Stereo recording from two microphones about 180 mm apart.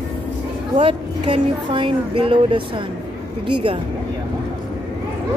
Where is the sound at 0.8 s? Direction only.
30° right (ahead or behind).